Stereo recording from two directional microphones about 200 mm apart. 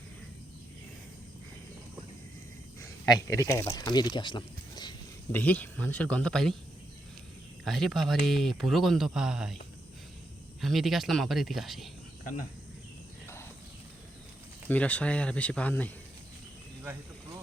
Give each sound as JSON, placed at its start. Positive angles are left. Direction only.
{"t": 2.8, "sound": "speech", "side_deg": 15}
{"t": 5.3, "sound": "speech", "side_deg": 10}
{"t": 7.6, "sound": "speech", "side_deg": 0}
{"t": 10.6, "sound": "speech", "side_deg": 0}
{"t": 12.2, "sound": "speech", "side_deg": 40}
{"t": 13.2, "sound": "cricket", "side_deg": 10}
{"t": 14.7, "sound": "speech", "side_deg": 5}